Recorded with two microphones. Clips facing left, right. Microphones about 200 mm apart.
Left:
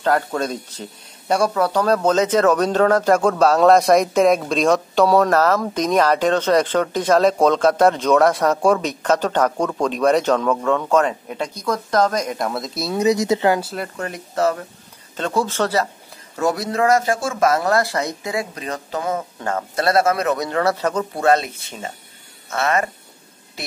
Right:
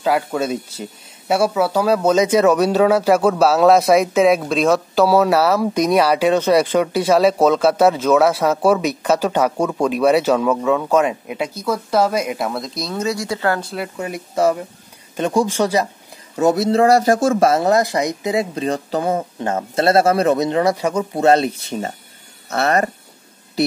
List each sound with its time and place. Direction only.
0.0 s speech: 5° right (ahead or behind)
12.9 s speech: 20° left (ahead or behind)
13.6 s speech: 5° left (ahead or behind)
13.9 s speech: 10° right (ahead or behind)
21.2 s speech: 30° right (ahead or behind)